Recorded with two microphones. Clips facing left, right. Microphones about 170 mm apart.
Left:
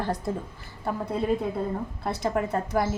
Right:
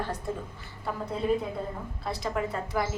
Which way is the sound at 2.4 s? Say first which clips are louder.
Left 3 dB; 50° left (ahead or behind).